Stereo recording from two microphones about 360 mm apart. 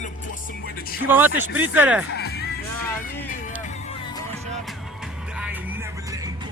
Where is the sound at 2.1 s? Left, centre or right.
Left.